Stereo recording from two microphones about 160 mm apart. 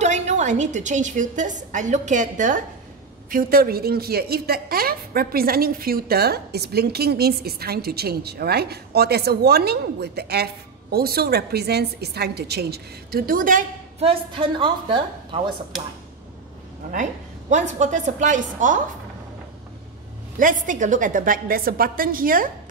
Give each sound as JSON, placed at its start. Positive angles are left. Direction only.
{"t": 0.0, "sound": "a woman's voice", "side_deg": -45}
{"t": 3.3, "sound": "a woman's voice", "side_deg": -65}
{"t": 13.9, "sound": "a woman's voice", "side_deg": -35}
{"t": 16.9, "sound": "a woman's voice", "side_deg": -50}
{"t": 20.3, "sound": "a woman's voice", "side_deg": -55}